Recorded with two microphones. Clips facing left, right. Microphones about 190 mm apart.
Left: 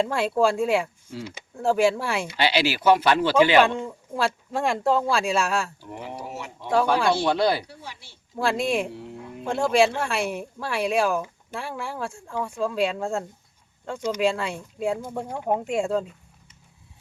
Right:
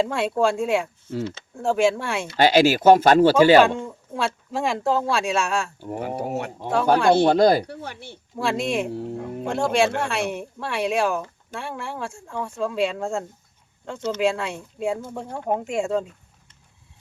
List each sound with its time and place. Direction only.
0.0 s speech: centre (ahead or behind)
1.2 s speech: 15° left (ahead or behind)
1.5 s speech: centre (ahead or behind)
2.3 s speech: 45° right (ahead or behind)
3.8 s speech: centre (ahead or behind)
5.8 s speech: 50° right (ahead or behind)
8.4 s speech: centre (ahead or behind)
8.9 s speech: 40° right (ahead or behind)
9.5 s speech: centre (ahead or behind)